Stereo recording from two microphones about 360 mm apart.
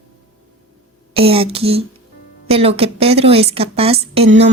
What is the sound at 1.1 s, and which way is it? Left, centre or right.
Speech, centre.